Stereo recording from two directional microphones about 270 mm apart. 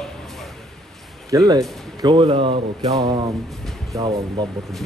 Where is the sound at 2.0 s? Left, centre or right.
Centre.